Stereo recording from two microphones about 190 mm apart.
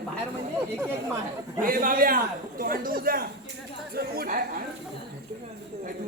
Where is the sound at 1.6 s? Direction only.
45° right (ahead or behind).